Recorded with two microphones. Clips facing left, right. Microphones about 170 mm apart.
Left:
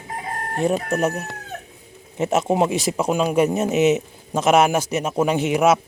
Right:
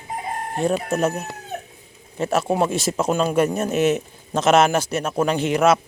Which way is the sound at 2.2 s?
20° left (ahead or behind).